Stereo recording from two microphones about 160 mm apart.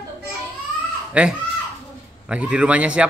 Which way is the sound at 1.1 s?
5° right (ahead or behind).